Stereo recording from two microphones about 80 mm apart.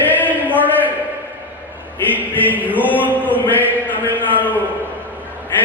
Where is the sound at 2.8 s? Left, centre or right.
Left.